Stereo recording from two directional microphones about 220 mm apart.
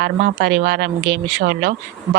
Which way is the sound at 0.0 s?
40° right (ahead or behind).